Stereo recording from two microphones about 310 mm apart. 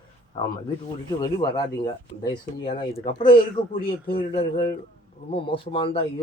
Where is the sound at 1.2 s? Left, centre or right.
Centre.